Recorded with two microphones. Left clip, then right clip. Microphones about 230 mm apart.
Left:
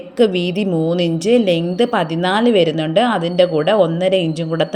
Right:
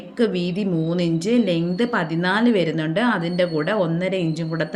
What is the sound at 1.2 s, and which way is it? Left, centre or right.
Speech, centre.